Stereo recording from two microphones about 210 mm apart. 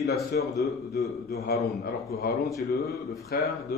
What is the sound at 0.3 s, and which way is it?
A man's voice, 50° left (ahead or behind).